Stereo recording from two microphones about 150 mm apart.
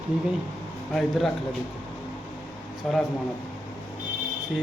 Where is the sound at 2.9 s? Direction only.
5° left (ahead or behind).